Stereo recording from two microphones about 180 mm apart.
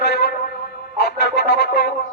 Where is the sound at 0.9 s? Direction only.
70° left (ahead or behind).